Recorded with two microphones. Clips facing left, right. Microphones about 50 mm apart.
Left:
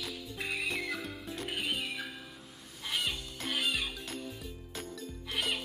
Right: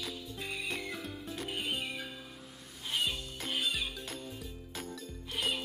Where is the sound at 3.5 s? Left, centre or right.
Left.